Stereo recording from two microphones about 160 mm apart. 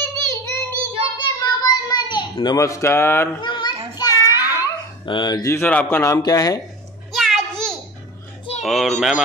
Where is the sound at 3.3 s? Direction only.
30° left (ahead or behind).